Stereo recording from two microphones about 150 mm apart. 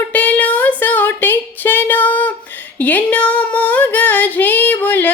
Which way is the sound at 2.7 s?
10° left (ahead or behind).